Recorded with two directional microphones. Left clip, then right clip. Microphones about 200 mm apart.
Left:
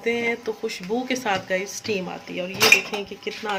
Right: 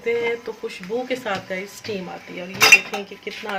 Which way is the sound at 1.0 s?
50° left (ahead or behind).